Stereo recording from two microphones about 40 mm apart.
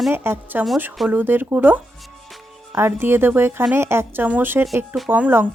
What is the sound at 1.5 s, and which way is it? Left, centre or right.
Speech, right.